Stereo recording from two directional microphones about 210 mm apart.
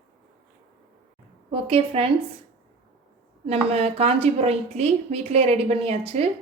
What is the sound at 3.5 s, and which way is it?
A woman's voice, 30° right (ahead or behind).